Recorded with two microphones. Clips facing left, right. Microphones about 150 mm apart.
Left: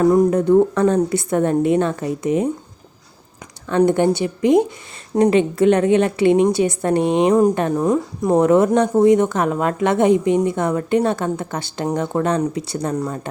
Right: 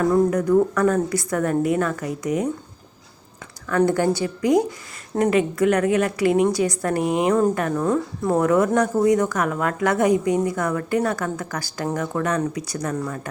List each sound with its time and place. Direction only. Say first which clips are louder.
0.0 s a woman's voice: left 4 dB; 20° left (ahead or behind)
3.7 s a woman's voice: left 4 dB; 25° left (ahead or behind)